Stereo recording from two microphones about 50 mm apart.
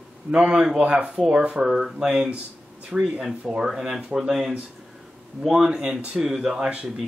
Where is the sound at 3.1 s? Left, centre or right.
Centre.